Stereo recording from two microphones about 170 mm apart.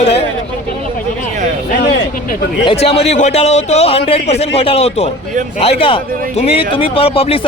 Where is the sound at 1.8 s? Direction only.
90° left.